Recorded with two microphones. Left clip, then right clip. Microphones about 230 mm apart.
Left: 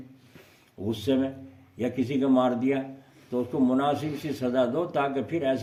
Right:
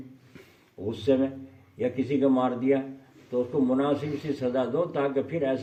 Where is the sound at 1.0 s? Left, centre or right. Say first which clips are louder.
Right 3 dB; left.